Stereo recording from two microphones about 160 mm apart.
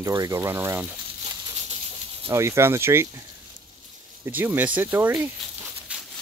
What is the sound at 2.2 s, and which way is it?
Speech, 15° right (ahead or behind).